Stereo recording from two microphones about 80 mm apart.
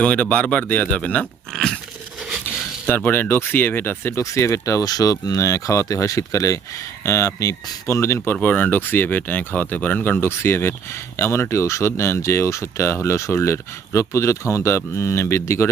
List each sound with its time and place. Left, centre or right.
0.0 s speech: centre
1.5 s biting: centre
2.8 s speech: left
8.2 s speech: left